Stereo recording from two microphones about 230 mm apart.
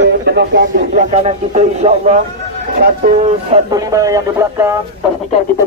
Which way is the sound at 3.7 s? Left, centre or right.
Centre.